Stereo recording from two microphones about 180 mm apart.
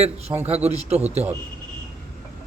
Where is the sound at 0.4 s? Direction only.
35° right (ahead or behind).